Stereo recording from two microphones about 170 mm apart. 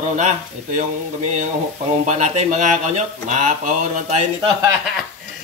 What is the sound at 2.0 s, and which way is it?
Speech, 45° right (ahead or behind).